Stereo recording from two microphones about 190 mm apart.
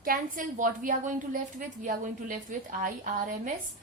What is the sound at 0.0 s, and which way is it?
A woman's voice, 45° right (ahead or behind).